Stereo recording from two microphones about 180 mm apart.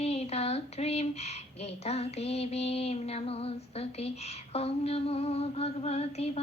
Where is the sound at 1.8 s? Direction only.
35° left (ahead or behind).